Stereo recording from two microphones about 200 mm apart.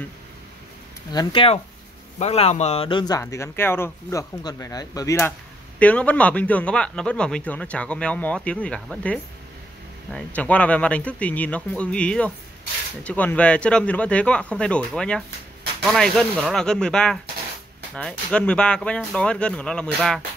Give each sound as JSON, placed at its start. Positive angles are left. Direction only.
{"t": 1.1, "sound": "speech", "side_deg": 25}